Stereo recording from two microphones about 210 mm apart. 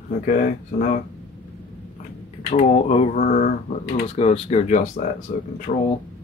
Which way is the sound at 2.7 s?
30° left (ahead or behind).